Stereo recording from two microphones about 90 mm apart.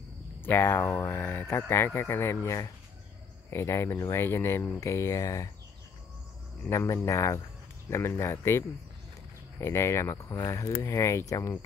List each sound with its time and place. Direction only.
0.4 s speech: 25° left (ahead or behind)
6.7 s speech: 35° left (ahead or behind)